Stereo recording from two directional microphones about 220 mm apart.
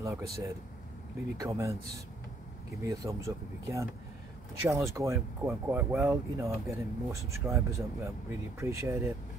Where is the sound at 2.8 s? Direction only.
15° right (ahead or behind).